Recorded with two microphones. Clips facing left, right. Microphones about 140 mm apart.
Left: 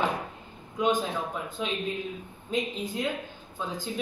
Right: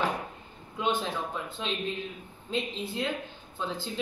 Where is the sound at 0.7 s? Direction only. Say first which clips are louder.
Left 4 dB; 10° left (ahead or behind).